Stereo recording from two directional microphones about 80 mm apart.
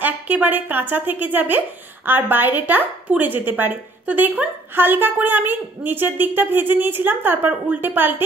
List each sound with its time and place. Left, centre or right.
0.0 s a woman's voice: right